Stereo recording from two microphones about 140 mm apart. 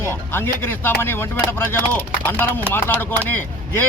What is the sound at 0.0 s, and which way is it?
Speech, 15° left (ahead or behind).